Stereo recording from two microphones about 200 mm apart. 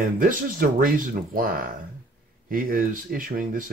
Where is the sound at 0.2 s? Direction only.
45° right (ahead or behind).